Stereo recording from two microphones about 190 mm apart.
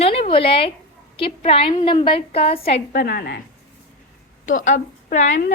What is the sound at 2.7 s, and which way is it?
Speech, 60° left (ahead or behind).